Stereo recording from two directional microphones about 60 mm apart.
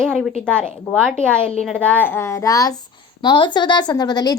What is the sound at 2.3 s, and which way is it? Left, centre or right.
Speech, left.